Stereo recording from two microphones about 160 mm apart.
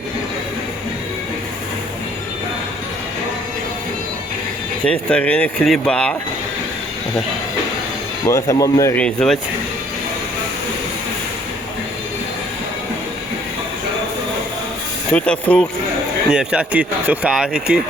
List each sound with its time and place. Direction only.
4.9 s speech: 5° left (ahead or behind)
8.3 s speech: 20° left (ahead or behind)
9.0 s speech: 5° left (ahead or behind)
15.1 s speech: 5° left (ahead or behind)
16.3 s speech: 5° right (ahead or behind)